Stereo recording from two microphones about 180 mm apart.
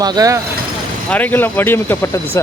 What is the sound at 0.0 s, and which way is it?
Speech, 20° right (ahead or behind).